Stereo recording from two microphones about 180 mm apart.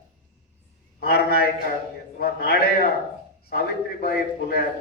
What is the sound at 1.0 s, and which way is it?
A man's voice, 60° left (ahead or behind).